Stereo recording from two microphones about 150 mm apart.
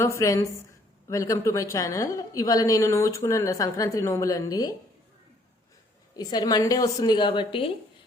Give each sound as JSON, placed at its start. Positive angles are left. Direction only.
{"t": 0.0, "sound": "a woman's voice", "side_deg": 20}
{"t": 6.1, "sound": "a woman's voice", "side_deg": 25}